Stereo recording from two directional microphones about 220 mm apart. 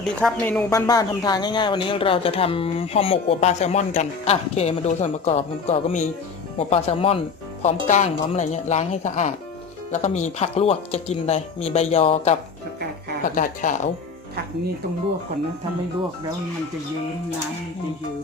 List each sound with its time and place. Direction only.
0.2 s speech: 5° left (ahead or behind)
0.7 s speech: 15° left (ahead or behind); by 13.7 s 40° left (ahead or behind)